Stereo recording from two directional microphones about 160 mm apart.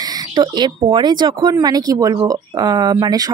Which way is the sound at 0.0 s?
25° right (ahead or behind).